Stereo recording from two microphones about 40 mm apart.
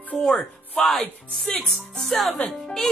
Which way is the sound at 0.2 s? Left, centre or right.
Centre.